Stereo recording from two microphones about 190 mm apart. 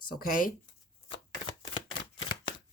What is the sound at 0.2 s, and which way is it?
Speech, 45° left (ahead or behind).